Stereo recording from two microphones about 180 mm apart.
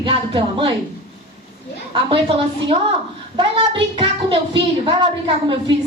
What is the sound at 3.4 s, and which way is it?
A child's voice, 30° right (ahead or behind).